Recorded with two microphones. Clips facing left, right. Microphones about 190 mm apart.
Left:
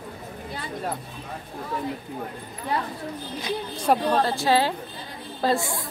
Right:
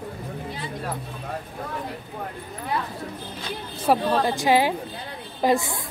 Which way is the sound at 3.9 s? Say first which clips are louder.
Right 1 dB; 15° right (ahead or behind).